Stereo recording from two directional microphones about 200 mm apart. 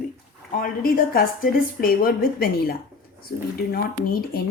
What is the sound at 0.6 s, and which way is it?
A woman's voice, 45° left (ahead or behind).